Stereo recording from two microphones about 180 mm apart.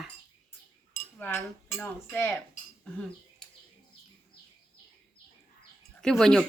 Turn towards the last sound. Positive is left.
turn(degrees=0)  # may be behind; listen again after turning